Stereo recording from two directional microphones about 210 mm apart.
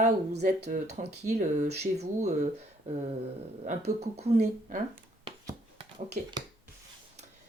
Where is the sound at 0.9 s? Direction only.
35° right (ahead or behind).